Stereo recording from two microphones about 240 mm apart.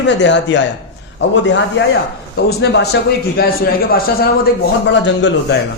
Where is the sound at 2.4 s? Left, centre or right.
Left.